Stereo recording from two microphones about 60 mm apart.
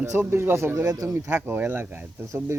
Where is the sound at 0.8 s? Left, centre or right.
Right.